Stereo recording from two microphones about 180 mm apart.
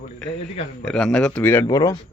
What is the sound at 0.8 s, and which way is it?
Speech, centre (ahead or behind).